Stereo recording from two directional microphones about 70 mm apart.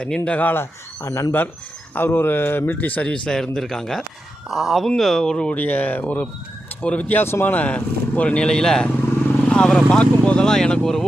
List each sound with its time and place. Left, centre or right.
0.3 s speech: left
1.0 s speech: left
2.0 s speech: left
3.1 s speech: centre
5.5 s speech: left
7.2 s speech: left
7.5 s speech: left